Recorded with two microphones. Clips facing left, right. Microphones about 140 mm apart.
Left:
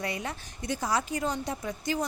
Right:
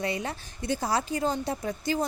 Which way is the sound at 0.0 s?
25° right (ahead or behind).